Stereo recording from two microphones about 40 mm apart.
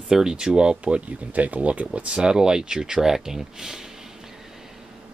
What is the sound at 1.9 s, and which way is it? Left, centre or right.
Speech, right.